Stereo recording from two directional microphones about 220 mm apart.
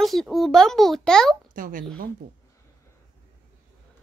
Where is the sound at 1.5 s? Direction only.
40° right (ahead or behind).